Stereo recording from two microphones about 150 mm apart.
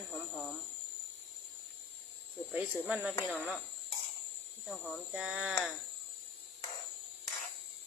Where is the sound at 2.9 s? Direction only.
10° right (ahead or behind).